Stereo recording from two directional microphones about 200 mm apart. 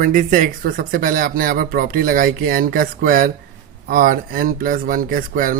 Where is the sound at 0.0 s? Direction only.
40° right (ahead or behind).